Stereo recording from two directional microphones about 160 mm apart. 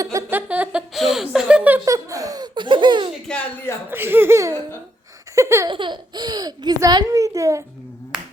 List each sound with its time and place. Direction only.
0.0 s speech: 20° right (ahead or behind)
1.8 s speech: 20° right (ahead or behind)
3.3 s speech: 5° left (ahead or behind)
3.8 s speech: 15° right (ahead or behind)
5.3 s laughter: 20° right (ahead or behind)
5.7 s speech: 30° right (ahead or behind)
8.1 s music: 5° right (ahead or behind)